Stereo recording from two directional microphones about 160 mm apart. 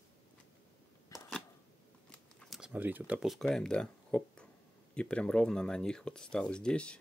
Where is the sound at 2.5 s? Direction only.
5° right (ahead or behind).